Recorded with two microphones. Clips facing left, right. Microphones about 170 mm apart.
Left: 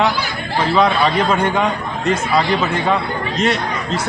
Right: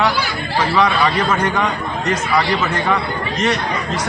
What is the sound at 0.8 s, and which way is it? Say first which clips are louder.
Speech: left 2 dB; 20° left (ahead or behind).